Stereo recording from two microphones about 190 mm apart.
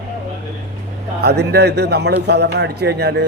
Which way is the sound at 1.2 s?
60° right (ahead or behind).